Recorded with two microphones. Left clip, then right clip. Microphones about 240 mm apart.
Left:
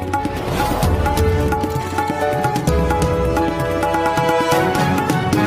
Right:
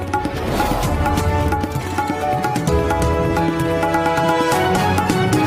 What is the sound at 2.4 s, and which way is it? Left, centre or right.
Music, centre.